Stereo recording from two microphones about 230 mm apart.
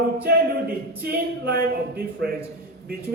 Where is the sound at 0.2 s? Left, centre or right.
Right.